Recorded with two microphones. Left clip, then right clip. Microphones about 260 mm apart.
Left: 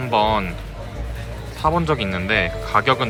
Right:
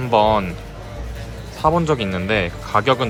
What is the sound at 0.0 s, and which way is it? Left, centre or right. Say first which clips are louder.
Speech: right 3 dB; centre.